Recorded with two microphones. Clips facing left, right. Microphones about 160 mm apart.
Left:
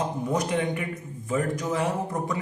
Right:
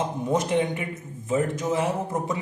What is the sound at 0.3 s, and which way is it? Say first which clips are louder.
A man's voice: right 3 dB; 25° right (ahead or behind).